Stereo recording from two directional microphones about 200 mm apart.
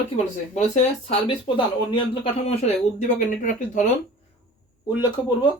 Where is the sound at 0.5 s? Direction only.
30° left (ahead or behind).